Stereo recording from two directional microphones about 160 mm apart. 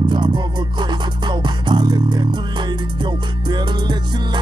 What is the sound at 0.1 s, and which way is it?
Music, 30° right (ahead or behind).